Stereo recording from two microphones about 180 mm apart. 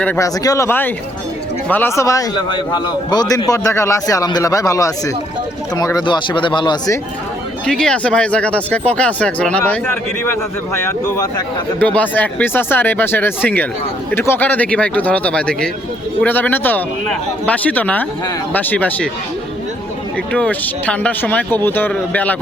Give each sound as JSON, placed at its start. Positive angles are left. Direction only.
{"t": 0.0, "sound": "a man's voice", "side_deg": 10}
{"t": 7.6, "sound": "speech", "side_deg": 5}
{"t": 20.3, "sound": "speech", "side_deg": 10}